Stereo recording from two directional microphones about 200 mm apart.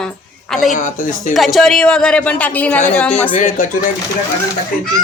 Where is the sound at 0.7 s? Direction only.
40° left (ahead or behind).